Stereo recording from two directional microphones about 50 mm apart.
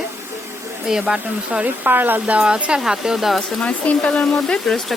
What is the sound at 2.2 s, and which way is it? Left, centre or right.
Speech, right.